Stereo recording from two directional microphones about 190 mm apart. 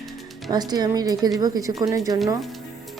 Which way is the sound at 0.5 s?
20° right (ahead or behind).